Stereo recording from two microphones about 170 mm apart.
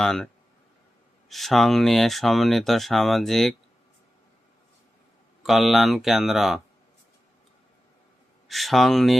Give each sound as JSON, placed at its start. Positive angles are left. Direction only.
{"t": 0.0, "sound": "speech", "side_deg": 5}
{"t": 1.3, "sound": "speech", "side_deg": 0}
{"t": 5.4, "sound": "speech", "side_deg": 0}
{"t": 8.4, "sound": "speech", "side_deg": 0}